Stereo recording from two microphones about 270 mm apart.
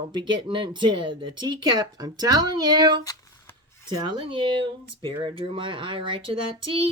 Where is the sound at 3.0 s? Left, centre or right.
Centre.